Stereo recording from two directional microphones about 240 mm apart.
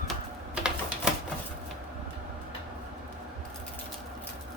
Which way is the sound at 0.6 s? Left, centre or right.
Centre.